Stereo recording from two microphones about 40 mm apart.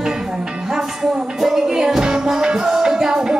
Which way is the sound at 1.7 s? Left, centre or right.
Centre.